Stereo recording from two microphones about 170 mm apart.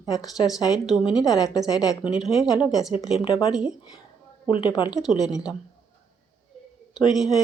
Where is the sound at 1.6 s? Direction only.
20° left (ahead or behind).